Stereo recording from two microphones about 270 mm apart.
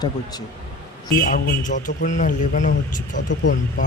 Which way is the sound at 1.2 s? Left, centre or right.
Left.